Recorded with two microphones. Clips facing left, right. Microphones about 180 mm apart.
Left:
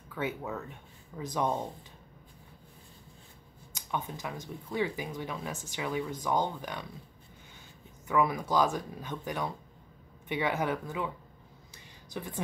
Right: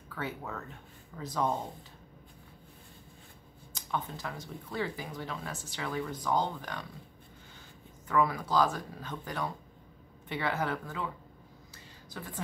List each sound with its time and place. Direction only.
0.1 s speech: 15° left (ahead or behind)
3.7 s speech: 15° left (ahead or behind)
8.1 s speech: 15° left (ahead or behind)
11.7 s a sound: 15° left (ahead or behind)